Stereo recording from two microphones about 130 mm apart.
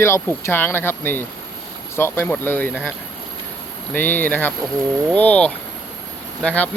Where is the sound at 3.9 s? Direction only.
15° left (ahead or behind).